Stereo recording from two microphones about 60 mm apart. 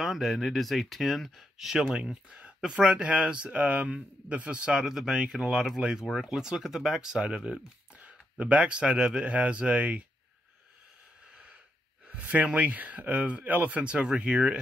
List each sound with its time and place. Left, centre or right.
0.0 s speech: centre
2.0 s speech: centre
7.9 s speech: right
12.1 s speech: right